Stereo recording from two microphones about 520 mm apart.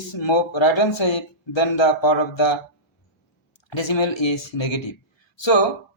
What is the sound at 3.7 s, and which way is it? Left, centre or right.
Speech, left.